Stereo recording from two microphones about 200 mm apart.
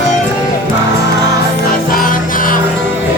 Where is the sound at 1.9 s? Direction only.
45° left (ahead or behind).